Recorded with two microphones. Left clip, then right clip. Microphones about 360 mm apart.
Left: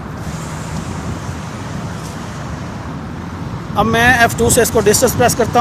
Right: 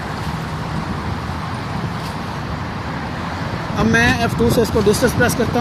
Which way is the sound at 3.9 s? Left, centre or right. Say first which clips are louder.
Left 5 dB; left.